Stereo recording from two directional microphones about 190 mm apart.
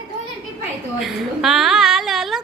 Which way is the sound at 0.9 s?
Centre (ahead or behind).